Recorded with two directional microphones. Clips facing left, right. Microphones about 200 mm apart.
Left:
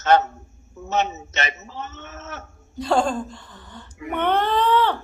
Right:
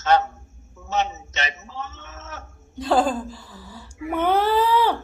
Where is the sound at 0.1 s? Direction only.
50° left (ahead or behind).